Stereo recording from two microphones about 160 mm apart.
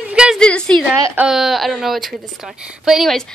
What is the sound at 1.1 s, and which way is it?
A woman's voice, 5° right (ahead or behind).